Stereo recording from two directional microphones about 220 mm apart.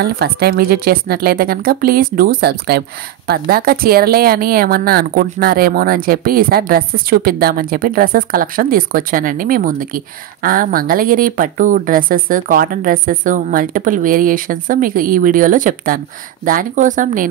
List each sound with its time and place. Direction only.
0.0 s speech: 45° right (ahead or behind)